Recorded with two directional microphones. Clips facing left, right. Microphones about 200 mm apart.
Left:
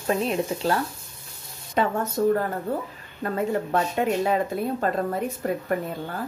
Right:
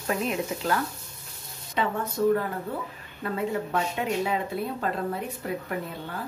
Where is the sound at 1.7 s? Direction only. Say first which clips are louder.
Left 4 dB; 45° left (ahead or behind).